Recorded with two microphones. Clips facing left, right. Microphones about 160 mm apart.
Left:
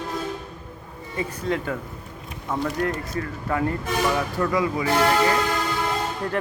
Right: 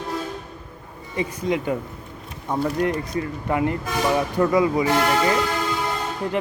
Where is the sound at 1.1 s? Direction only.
15° right (ahead or behind).